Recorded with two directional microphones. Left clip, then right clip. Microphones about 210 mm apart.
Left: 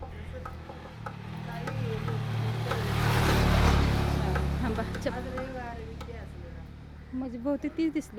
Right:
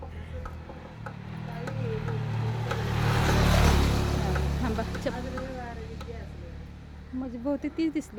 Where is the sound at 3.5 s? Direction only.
50° right (ahead or behind).